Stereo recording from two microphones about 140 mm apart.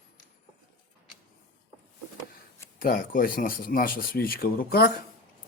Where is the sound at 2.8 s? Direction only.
90° left.